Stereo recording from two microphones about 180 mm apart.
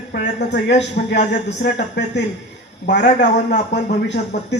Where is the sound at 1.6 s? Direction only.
70° left (ahead or behind).